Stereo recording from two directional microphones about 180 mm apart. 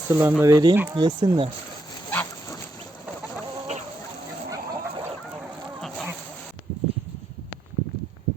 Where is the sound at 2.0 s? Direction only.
10° left (ahead or behind).